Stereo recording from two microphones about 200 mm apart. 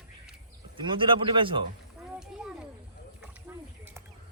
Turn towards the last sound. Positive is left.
turn(degrees=-10)  # may be behind; listen again after turning